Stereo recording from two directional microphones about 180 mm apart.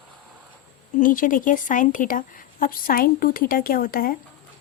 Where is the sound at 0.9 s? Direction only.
45° left (ahead or behind).